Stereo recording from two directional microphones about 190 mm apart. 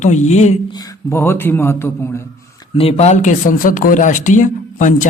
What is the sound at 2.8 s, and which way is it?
Speech, 35° left (ahead or behind).